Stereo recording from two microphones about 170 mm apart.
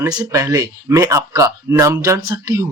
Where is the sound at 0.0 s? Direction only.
20° right (ahead or behind).